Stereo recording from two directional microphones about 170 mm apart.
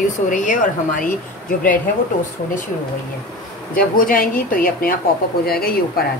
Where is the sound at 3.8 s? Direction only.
55° left (ahead or behind).